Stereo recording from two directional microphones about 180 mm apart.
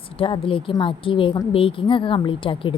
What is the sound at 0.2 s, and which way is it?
A woman's voice, 30° left (ahead or behind).